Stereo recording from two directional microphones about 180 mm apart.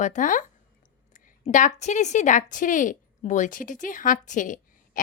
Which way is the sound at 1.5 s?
45° left (ahead or behind).